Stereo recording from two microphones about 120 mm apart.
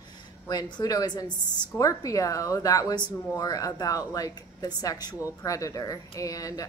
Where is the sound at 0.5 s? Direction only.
35° left (ahead or behind).